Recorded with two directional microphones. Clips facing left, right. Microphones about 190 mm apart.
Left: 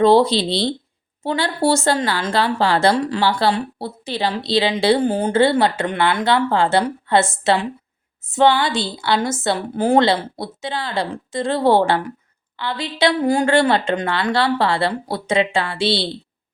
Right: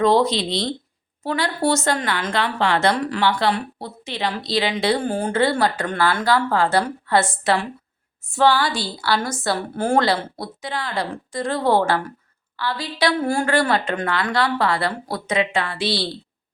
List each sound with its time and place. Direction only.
0.0 s a woman's voice: 30° left (ahead or behind)